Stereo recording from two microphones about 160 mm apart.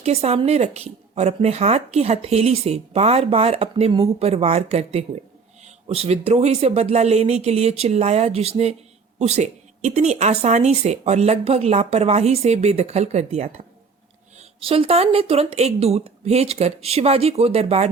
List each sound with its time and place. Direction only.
0.0 s a woman's voice: 40° right (ahead or behind)